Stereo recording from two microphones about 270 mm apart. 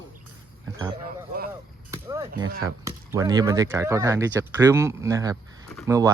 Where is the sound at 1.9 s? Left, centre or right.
Centre.